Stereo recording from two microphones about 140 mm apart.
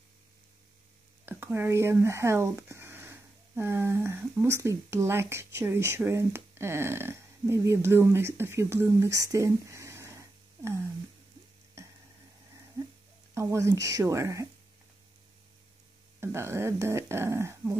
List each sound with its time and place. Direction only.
1.2 s speech: 15° right (ahead or behind)
13.3 s speech: 20° right (ahead or behind)
16.2 s speech: 20° right (ahead or behind)